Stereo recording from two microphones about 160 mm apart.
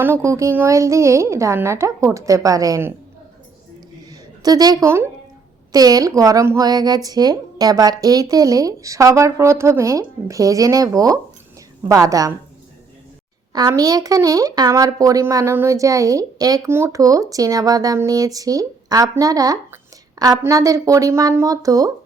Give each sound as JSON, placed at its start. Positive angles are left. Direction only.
{"t": 0.0, "sound": "speech", "side_deg": -15}
{"t": 4.4, "sound": "speech", "side_deg": -25}
{"t": 13.5, "sound": "speech", "side_deg": -25}